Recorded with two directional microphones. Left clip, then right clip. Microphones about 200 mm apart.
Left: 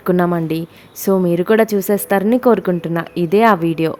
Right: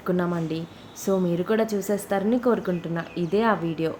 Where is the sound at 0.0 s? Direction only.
45° left (ahead or behind).